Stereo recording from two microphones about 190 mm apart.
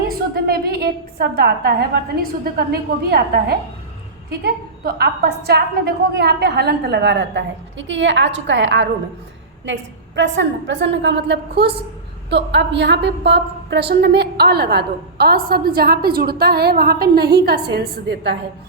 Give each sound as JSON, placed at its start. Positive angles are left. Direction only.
{"t": 0.1, "sound": "a woman's voice", "side_deg": -55}
{"t": 10.2, "sound": "a woman's voice", "side_deg": -75}